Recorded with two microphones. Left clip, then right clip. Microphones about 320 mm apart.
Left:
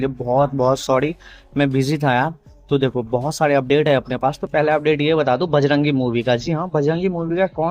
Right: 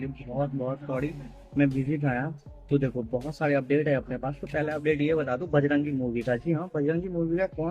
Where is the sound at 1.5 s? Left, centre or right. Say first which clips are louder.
Left 8 dB; left.